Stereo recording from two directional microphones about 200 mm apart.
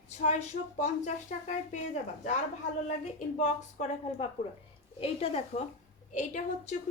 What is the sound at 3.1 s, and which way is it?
A woman's voice, 35° left (ahead or behind).